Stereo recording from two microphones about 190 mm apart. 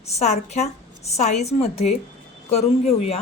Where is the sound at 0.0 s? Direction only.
35° left (ahead or behind).